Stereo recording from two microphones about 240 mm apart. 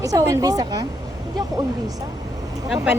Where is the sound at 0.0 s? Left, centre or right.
Centre.